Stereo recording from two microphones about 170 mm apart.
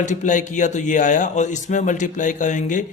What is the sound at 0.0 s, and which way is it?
Speech, 45° left (ahead or behind).